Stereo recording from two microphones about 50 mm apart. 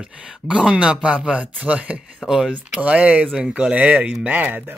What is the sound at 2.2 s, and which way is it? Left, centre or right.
Speech, centre.